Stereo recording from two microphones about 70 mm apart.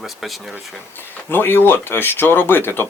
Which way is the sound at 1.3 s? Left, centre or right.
Left.